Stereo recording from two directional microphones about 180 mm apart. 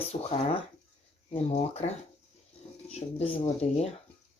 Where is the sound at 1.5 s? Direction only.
35° left (ahead or behind).